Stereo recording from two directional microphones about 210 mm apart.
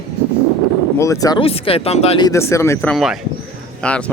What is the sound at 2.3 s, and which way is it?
Speech, 15° left (ahead or behind).